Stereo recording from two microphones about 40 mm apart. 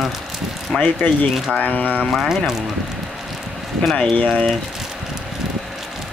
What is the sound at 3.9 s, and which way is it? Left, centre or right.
Speech, left.